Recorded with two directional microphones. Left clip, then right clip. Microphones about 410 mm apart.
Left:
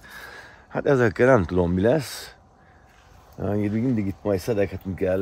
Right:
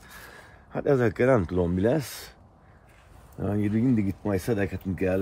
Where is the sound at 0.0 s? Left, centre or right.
Left.